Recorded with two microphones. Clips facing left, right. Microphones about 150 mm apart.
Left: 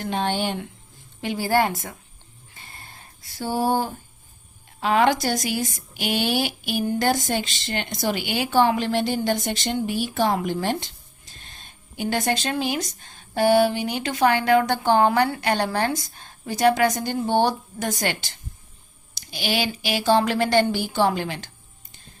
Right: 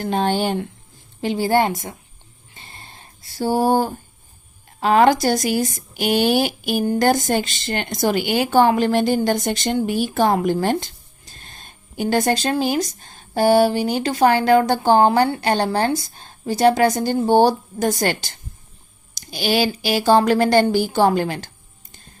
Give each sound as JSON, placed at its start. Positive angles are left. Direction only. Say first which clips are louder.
{"t": 0.0, "sound": "speech", "louder": "right 5 dB", "side_deg": -40}
{"t": 1.2, "sound": "a woman's voice", "louder": "right 4 dB", "side_deg": -25}
{"t": 2.6, "sound": "a sound", "louder": "right 2 dB", "side_deg": -25}
{"t": 4.8, "sound": "speech", "louder": "right 5 dB", "side_deg": -40}